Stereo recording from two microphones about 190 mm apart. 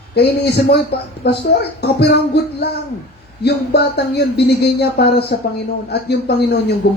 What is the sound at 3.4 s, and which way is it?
Speech, 60° left (ahead or behind).